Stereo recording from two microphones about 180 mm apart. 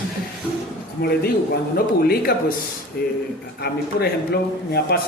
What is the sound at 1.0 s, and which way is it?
A man's voice, 55° left (ahead or behind).